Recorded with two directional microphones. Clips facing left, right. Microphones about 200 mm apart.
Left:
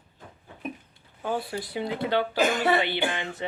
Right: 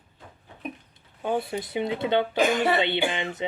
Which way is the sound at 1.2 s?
20° right (ahead or behind).